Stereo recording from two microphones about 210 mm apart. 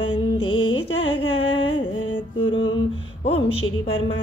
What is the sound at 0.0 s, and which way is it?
Music, 90° left.